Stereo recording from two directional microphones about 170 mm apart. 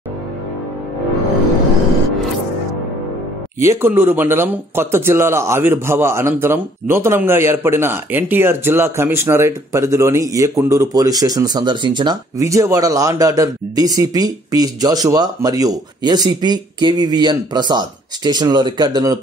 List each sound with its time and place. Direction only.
3.5 s speech: 15° right (ahead or behind)